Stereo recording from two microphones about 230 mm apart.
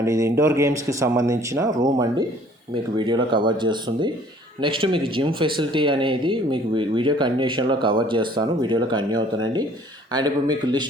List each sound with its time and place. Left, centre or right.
0.0 s speech: centre